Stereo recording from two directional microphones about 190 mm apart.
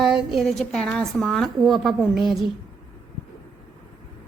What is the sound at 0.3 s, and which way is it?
A woman's voice, centre (ahead or behind).